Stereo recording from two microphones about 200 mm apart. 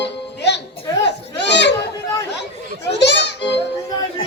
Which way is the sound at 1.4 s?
60° left (ahead or behind).